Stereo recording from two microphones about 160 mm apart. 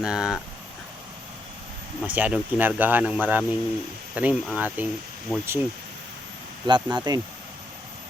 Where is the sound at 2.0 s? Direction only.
10° right (ahead or behind).